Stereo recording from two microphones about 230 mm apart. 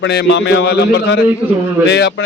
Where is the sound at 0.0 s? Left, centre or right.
Left.